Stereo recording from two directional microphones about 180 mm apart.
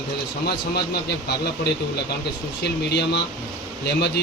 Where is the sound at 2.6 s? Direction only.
70° left (ahead or behind).